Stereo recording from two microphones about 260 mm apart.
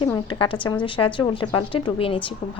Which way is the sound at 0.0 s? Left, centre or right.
Centre.